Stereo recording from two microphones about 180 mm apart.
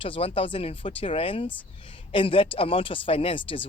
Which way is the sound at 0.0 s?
30° left (ahead or behind).